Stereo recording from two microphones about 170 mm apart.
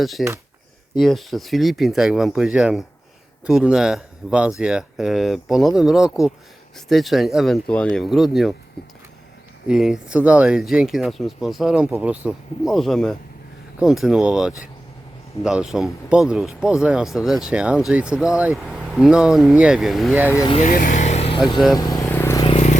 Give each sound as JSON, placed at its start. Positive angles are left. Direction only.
{"t": 0.0, "sound": "speech", "side_deg": 0}
{"t": 9.6, "sound": "speech", "side_deg": -5}
{"t": 20.5, "sound": "speech", "side_deg": 45}
{"t": 21.8, "sound": "vehicle", "side_deg": 20}
{"t": 22.5, "sound": "a sound", "side_deg": 45}